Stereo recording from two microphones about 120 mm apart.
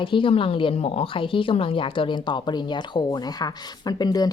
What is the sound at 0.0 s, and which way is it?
Speech, 45° left (ahead or behind).